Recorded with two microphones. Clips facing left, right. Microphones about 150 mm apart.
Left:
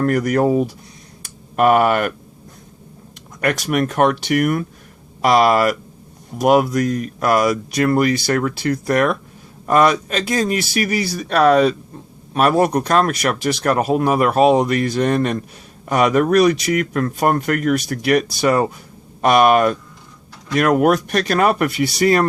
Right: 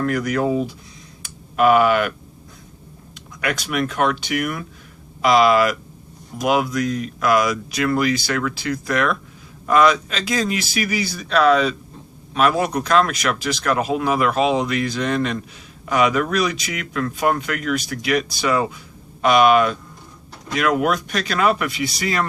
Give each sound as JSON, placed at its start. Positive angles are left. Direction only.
{"t": 0.0, "sound": "speech", "side_deg": 45}
{"t": 3.4, "sound": "speech", "side_deg": 45}